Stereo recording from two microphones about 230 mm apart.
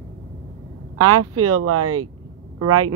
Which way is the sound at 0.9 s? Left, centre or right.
Right.